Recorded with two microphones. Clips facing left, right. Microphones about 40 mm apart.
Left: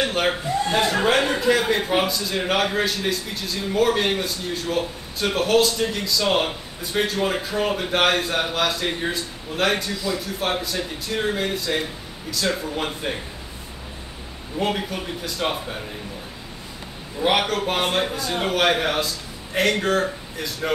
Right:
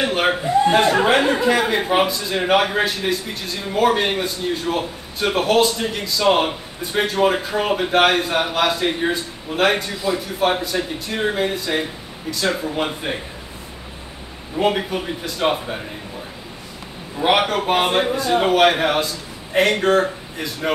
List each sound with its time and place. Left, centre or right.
0.0 s a man's voice: centre
14.6 s a man's voice: centre
17.2 s a man's voice: centre